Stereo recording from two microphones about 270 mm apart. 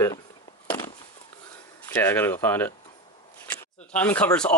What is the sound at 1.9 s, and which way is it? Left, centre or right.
Speech, centre.